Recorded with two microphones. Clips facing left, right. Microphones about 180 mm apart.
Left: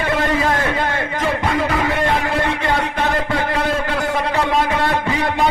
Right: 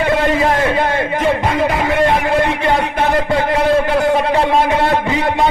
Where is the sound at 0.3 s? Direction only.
20° right (ahead or behind).